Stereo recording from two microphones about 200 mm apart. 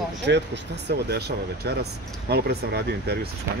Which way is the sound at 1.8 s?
50° right (ahead or behind).